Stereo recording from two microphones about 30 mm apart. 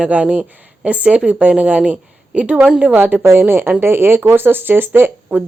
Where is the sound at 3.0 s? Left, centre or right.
Right.